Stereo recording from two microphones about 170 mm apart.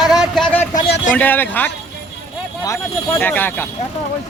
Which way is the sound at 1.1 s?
10° left (ahead or behind).